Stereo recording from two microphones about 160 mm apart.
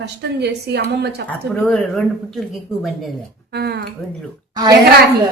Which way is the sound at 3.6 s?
85° right.